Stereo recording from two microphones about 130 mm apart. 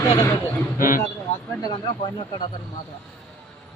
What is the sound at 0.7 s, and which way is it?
Speech, 90° left.